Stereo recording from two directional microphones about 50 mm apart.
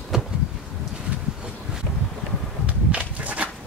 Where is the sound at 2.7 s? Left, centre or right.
Right.